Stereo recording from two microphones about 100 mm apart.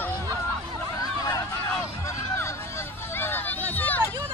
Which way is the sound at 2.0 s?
30° left (ahead or behind).